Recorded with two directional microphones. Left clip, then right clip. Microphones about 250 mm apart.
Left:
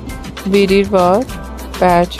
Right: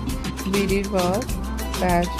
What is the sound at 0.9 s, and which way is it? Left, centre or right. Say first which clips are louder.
Speech: left 11 dB; left.